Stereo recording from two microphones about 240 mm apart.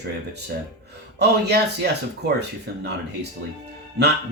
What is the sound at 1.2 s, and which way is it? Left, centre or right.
Speech, right.